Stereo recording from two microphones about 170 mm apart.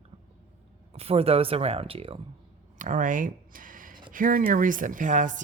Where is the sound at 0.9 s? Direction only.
35° right (ahead or behind).